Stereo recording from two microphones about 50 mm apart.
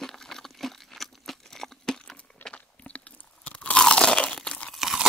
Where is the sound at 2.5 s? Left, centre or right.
Left.